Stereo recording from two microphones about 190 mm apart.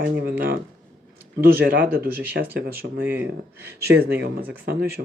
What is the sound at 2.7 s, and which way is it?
Speech, 50° right (ahead or behind).